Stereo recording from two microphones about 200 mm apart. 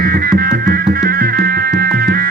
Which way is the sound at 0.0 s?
50° right (ahead or behind).